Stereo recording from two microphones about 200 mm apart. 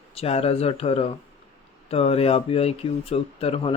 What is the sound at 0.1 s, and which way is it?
Speech, 30° left (ahead or behind).